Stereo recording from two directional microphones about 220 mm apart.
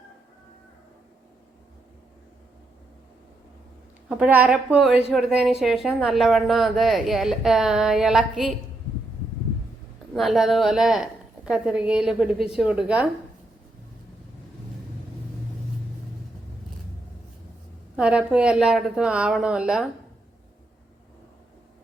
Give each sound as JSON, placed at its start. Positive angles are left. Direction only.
{"t": 4.1, "sound": "a woman's voice", "side_deg": -5}
{"t": 10.2, "sound": "a woman's voice", "side_deg": 0}
{"t": 17.9, "sound": "a woman's voice", "side_deg": -5}